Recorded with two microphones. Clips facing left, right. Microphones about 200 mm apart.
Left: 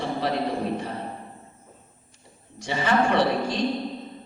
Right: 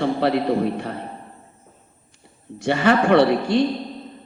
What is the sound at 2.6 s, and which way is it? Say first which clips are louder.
Speech: right 5 dB; 65° right (ahead or behind).